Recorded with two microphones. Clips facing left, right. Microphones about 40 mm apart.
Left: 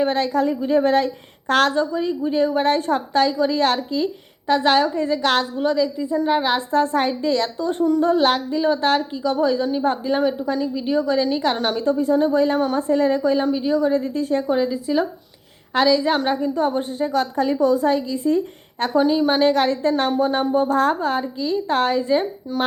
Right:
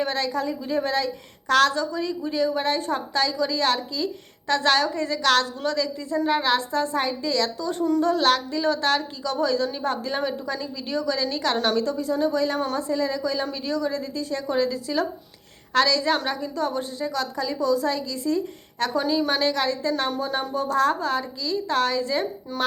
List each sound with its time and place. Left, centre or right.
0.0 s a woman's voice: left
2.5 s a woman's voice: left
4.4 s a woman's voice: left
6.7 s a woman's voice: left; by 11.9 s centre
11.9 s a woman's voice: left
14.4 s a woman's voice: centre
19.5 s a woman's voice: left
22.5 s speech: centre